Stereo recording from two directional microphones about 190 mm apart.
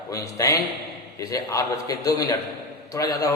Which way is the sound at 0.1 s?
15° left (ahead or behind).